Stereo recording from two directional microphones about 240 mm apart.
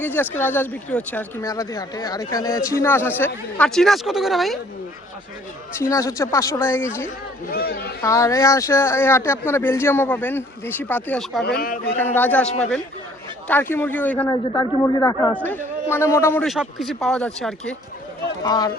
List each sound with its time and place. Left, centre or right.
0.0 s speech: centre
5.8 s speech: centre
7.5 s a man's voice: left
8.0 s speech: centre
11.4 s a man's voice: left
11.9 s a man's voice: centre
18.4 s speech: centre